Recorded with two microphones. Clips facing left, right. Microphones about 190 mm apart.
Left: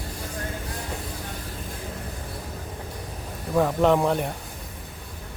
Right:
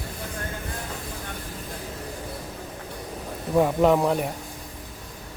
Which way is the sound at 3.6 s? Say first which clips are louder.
Right 1 dB; 10° right (ahead or behind).